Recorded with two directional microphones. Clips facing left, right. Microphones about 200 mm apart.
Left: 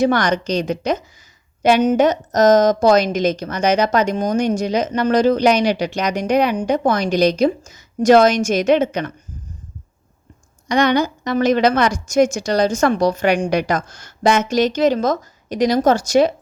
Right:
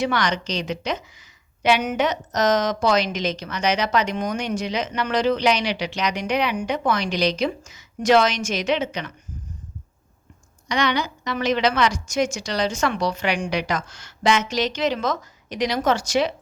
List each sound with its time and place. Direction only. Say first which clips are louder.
0.0 s a woman's voice: left 7 dB; 50° left (ahead or behind)
10.7 s a woman's voice: left 7 dB; 50° left (ahead or behind)